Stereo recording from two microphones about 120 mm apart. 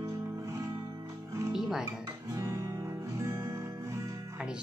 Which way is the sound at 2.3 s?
25° right (ahead or behind).